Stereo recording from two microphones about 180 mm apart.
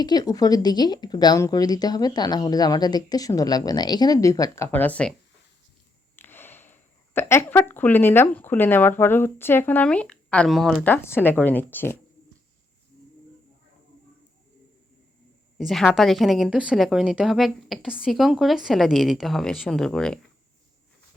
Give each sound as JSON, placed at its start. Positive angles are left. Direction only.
{"t": 0.0, "sound": "speech", "side_deg": 20}
{"t": 6.1, "sound": "speech", "side_deg": 10}
{"t": 15.5, "sound": "speech", "side_deg": 0}